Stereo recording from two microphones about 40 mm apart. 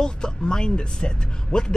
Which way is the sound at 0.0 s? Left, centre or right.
Centre.